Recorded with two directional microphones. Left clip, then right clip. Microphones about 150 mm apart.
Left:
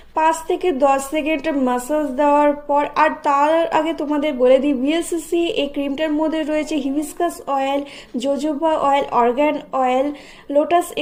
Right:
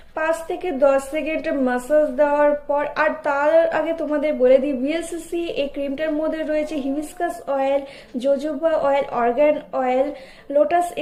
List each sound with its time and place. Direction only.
0.1 s a woman's voice: 30° left (ahead or behind)